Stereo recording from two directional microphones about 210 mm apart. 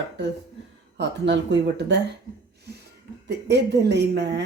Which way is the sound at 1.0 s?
55° right (ahead or behind).